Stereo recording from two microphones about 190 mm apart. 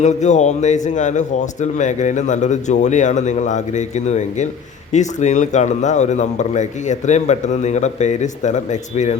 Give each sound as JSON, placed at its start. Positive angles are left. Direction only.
{"t": 0.0, "sound": "a man's voice", "side_deg": 40}